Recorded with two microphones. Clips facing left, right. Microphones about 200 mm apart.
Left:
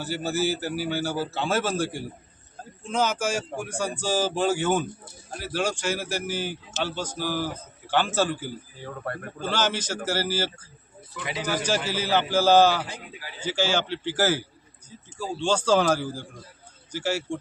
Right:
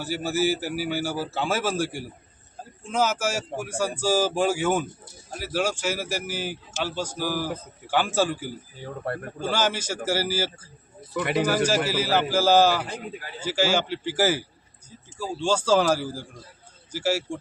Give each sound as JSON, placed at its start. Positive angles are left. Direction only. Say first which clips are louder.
{"t": 0.0, "sound": "speech", "louder": "right 2 dB", "side_deg": -10}
{"t": 11.1, "sound": "speech", "louder": "right 9 dB", "side_deg": -60}
{"t": 11.9, "sound": "speech", "louder": "right 1 dB", "side_deg": -5}